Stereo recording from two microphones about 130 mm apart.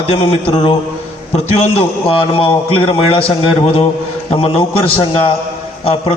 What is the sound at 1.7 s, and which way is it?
A man's voice, 45° left (ahead or behind).